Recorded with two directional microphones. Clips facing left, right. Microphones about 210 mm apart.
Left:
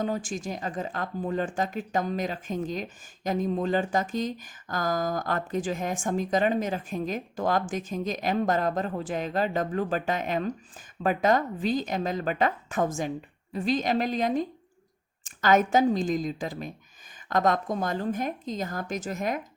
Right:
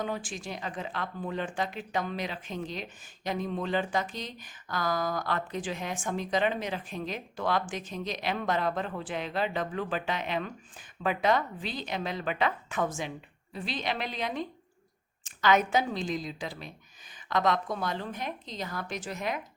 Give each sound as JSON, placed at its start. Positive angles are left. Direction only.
{"t": 0.0, "sound": "speech", "side_deg": 45}